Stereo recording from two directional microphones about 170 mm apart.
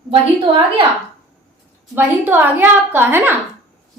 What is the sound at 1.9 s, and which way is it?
A woman's voice, 15° right (ahead or behind).